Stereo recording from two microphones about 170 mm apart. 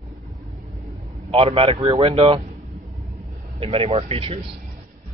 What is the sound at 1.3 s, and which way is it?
Speech, 35° right (ahead or behind).